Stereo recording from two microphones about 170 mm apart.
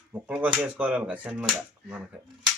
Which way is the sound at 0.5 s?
5° right (ahead or behind).